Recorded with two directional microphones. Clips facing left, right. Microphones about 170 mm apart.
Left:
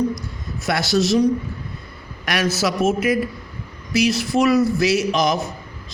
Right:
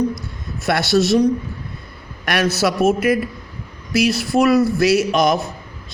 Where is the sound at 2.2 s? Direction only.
55° right (ahead or behind).